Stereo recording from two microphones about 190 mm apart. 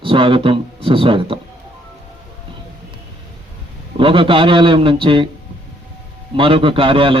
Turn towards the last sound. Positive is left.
turn(degrees=-25)  # may be behind; listen again after turning